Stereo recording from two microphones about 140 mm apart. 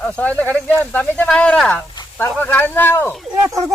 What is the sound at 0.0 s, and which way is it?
Speech, 10° left (ahead or behind).